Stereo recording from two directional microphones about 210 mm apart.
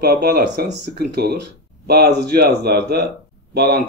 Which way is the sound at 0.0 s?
50° right (ahead or behind).